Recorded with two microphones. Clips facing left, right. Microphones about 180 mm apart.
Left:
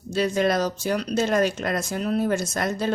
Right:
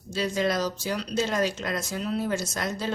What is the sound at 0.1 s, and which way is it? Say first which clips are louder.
Speech: left 4 dB; 55° left (ahead or behind).